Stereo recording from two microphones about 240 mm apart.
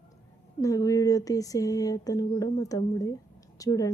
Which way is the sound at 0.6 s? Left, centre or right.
Centre.